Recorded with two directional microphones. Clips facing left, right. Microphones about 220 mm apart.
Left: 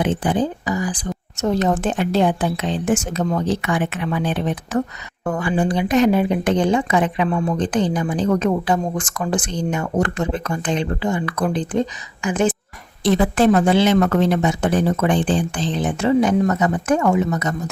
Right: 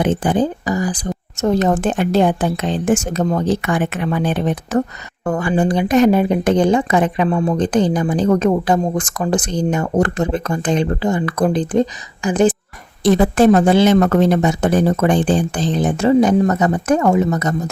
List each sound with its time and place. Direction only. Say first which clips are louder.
0.0 s speech: right 3 dB; 45° right (ahead or behind)